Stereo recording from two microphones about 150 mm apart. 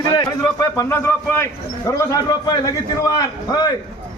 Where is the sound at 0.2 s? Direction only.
25° left (ahead or behind).